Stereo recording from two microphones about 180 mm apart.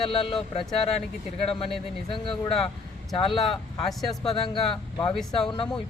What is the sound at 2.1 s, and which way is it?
A woman's voice, 30° left (ahead or behind).